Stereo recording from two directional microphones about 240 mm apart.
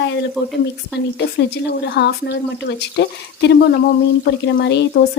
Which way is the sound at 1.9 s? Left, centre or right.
Left.